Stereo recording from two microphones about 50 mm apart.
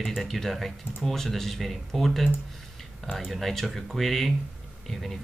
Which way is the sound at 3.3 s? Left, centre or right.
Centre.